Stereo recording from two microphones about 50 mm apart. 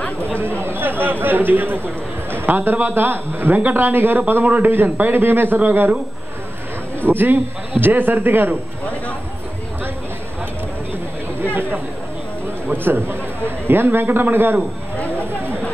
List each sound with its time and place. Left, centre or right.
0.0 s a sound: left
0.4 s a man's voice: right
4.8 s a man's voice: right
5.1 s a man's voice: right
7.0 s a man's voice: right
11.4 s chatter: right
12.6 s a man's voice: right